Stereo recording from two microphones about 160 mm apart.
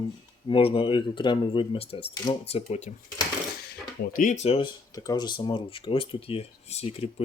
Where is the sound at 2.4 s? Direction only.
40° left (ahead or behind).